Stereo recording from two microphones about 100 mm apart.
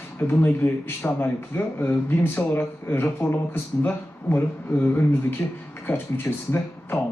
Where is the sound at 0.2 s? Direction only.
20° left (ahead or behind).